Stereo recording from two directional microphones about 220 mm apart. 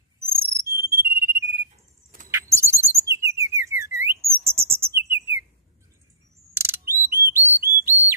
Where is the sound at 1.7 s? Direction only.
35° right (ahead or behind).